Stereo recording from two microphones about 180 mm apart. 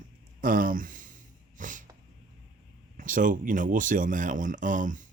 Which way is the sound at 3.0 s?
45° right (ahead or behind).